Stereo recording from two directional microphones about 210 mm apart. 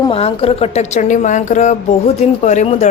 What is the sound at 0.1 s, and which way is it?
Speech, 30° left (ahead or behind).